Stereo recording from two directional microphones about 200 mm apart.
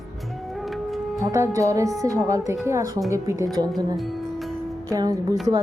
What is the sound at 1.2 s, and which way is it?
Speech, 15° right (ahead or behind).